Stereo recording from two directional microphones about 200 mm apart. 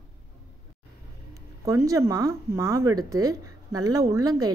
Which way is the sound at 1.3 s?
15° right (ahead or behind).